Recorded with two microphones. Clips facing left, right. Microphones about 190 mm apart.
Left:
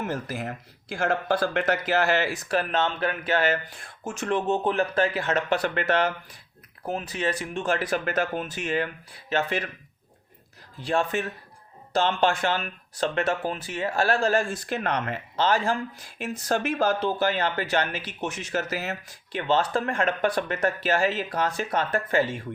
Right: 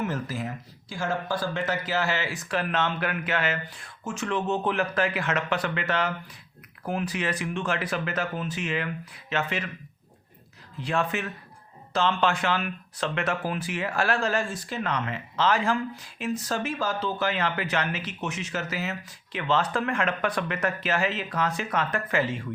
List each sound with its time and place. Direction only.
0.0 s speech: 55° left (ahead or behind)
4.6 s speech: 30° left (ahead or behind)
5.7 s speech: 45° left (ahead or behind)
6.8 s speech: 25° left (ahead or behind)
10.8 s speech: 35° left (ahead or behind)
13.4 s speech: 30° left (ahead or behind)
14.4 s speech: 50° left (ahead or behind)
15.4 s speech: 35° left (ahead or behind)
16.0 s speech: 50° left (ahead or behind)